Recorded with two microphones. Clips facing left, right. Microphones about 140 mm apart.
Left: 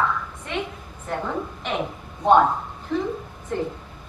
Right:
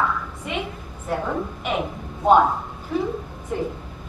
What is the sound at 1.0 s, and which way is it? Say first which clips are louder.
Speech: right 2 dB; 5° right (ahead or behind).